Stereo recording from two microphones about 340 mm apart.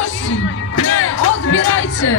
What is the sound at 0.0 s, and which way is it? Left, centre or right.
Music, left.